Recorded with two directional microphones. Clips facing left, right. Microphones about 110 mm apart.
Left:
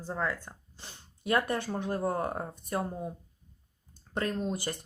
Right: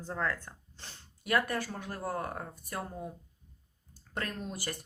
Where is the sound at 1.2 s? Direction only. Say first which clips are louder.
Left 2 dB; 25° left (ahead or behind).